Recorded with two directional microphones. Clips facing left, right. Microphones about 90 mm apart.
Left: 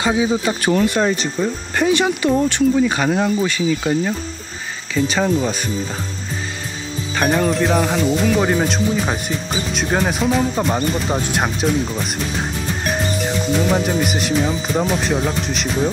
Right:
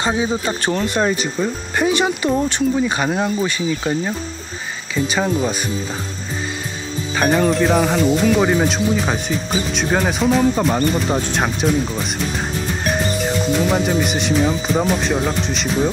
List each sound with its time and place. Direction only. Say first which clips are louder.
0.0 s speech: left 2 dB; 35° right (ahead or behind)
1.0 s speech: even; 5° right (ahead or behind)
2.4 s speech: left 3 dB; 20° right (ahead or behind)
7.2 s speech: right 1 dB; centre (ahead or behind)